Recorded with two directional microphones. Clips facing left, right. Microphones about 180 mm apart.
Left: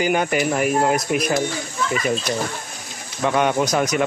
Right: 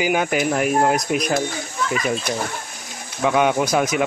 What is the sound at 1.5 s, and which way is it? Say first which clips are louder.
Speech: left 1 dB; 50° right (ahead or behind).